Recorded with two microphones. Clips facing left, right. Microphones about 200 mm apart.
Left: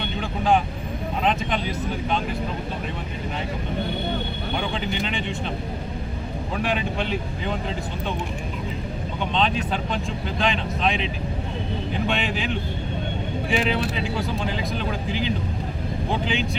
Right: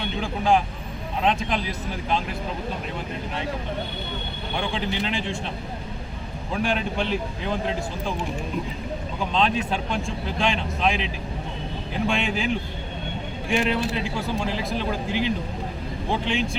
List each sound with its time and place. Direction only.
0.2 s speech: centre (ahead or behind)
4.7 s speech: centre (ahead or behind)
6.5 s speech: centre (ahead or behind)
9.3 s speech: centre (ahead or behind)
13.5 s speech: centre (ahead or behind)